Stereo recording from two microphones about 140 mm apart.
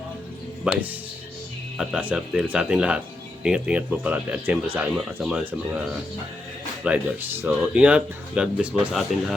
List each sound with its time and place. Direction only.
0.6 s speech: 10° right (ahead or behind)